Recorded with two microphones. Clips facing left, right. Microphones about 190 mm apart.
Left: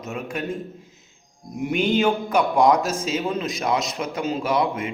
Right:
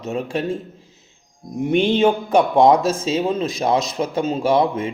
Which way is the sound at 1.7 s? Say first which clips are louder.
Right 4 dB; 30° right (ahead or behind).